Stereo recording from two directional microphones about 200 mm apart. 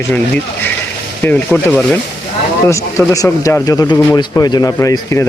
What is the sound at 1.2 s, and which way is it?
Speech, 10° left (ahead or behind).